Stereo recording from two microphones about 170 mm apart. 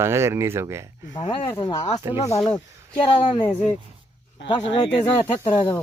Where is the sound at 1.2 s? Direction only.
30° left (ahead or behind).